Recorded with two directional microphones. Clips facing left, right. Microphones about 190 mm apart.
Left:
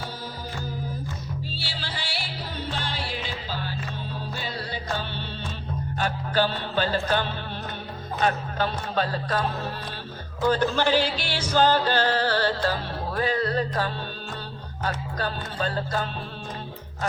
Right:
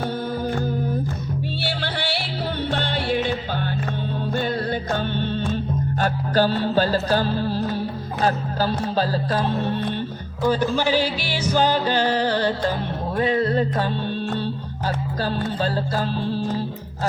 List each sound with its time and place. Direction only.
0.0 s music: 55° right (ahead or behind); by 9.8 s 25° right (ahead or behind)
10.4 s music: 10° right (ahead or behind); by 16.4 s 30° right (ahead or behind)